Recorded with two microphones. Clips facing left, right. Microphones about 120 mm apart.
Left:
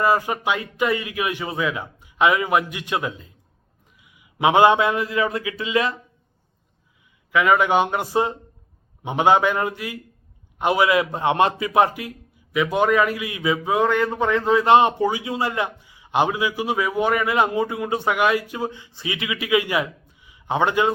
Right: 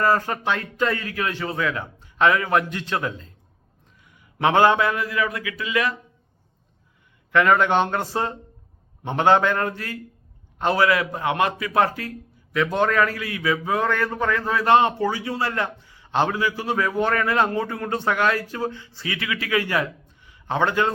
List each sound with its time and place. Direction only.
0.0 s a man's voice: 15° left (ahead or behind)
7.3 s a man's voice: 5° left (ahead or behind)